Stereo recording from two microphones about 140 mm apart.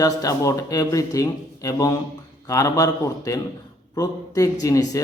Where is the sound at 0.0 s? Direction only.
25° left (ahead or behind).